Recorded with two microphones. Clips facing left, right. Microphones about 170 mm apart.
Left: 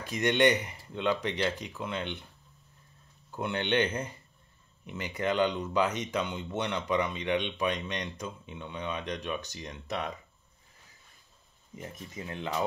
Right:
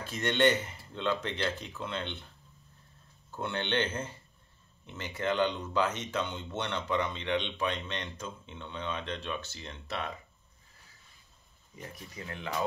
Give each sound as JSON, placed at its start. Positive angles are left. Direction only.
{"t": 0.0, "sound": "speech", "side_deg": 15}
{"t": 3.3, "sound": "speech", "side_deg": 15}
{"t": 11.7, "sound": "speech", "side_deg": 25}